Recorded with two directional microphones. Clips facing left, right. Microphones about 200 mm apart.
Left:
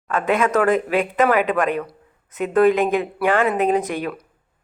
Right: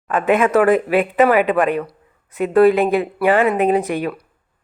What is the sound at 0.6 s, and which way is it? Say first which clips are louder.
Speech: right 4 dB; centre (ahead or behind).